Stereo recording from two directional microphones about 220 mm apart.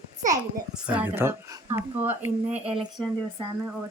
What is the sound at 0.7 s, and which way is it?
Speech, 5° right (ahead or behind).